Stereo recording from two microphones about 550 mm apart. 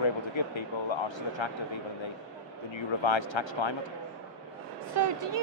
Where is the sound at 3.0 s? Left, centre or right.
Left.